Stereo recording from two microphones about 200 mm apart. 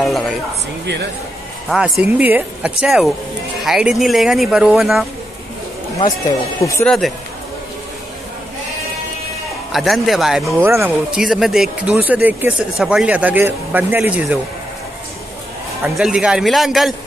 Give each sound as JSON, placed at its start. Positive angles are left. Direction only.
{"t": 0.0, "sound": "speech", "side_deg": 0}
{"t": 1.7, "sound": "speech", "side_deg": -5}
{"t": 6.6, "sound": "speech", "side_deg": 15}
{"t": 9.7, "sound": "speech", "side_deg": 0}
{"t": 10.6, "sound": "speech", "side_deg": -10}
{"t": 15.8, "sound": "speech", "side_deg": 0}